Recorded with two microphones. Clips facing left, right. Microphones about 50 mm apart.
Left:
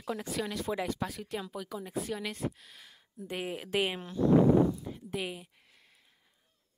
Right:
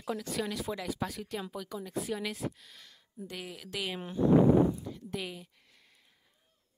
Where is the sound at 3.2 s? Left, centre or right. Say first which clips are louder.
Left 6 dB; left.